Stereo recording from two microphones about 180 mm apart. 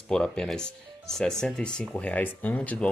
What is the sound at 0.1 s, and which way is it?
Speech, 5° left (ahead or behind).